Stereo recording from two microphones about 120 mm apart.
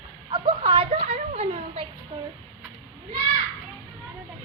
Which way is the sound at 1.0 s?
65° right (ahead or behind).